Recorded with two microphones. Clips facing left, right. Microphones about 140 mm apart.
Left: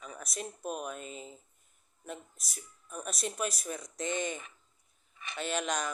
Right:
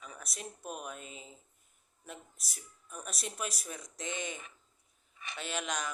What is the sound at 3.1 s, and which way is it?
Speech, 5° right (ahead or behind).